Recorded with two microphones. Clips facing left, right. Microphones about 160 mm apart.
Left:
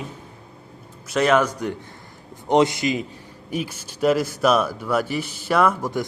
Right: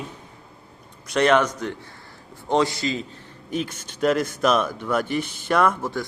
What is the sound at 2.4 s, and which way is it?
A man's voice, 20° left (ahead or behind).